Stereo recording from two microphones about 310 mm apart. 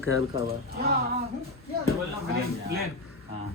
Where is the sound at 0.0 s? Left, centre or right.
Left.